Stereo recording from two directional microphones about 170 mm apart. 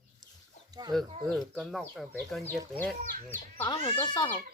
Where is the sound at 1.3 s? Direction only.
5° left (ahead or behind).